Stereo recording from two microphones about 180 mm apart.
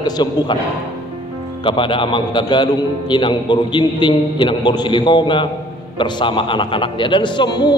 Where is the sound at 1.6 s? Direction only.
30° left (ahead or behind).